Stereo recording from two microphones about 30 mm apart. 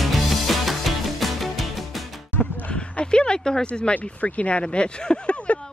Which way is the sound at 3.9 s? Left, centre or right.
Left.